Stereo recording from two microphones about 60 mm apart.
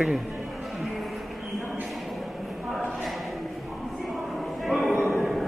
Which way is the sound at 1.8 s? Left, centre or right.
Centre.